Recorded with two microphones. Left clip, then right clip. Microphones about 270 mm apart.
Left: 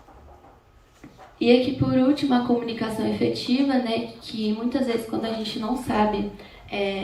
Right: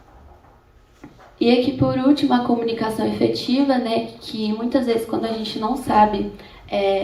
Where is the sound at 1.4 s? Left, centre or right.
Centre.